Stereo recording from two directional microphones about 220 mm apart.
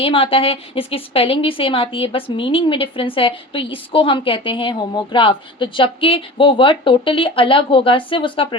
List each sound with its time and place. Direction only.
0.0 s a woman's voice: 25° left (ahead or behind)